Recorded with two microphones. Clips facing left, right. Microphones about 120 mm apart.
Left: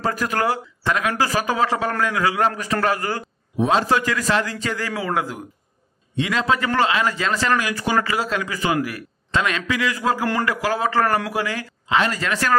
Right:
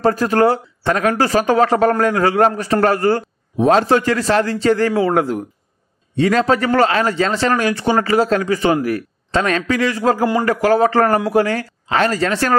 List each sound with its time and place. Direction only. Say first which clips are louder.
0.0 s a man's voice: right 8 dB; 35° right (ahead or behind)